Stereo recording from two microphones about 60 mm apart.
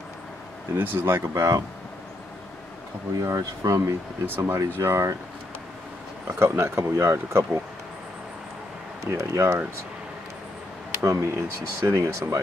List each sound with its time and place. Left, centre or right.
0.7 s speech: right
1.3 s speech: right
3.2 s speech: right
4.3 s speech: right
4.6 s speech: right
6.4 s speech: right
9.0 s speech: right
11.0 s speech: right